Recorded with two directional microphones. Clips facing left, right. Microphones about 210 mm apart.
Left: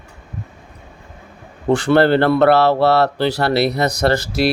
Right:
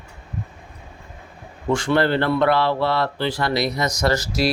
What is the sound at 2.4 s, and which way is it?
Speech, 75° left (ahead or behind).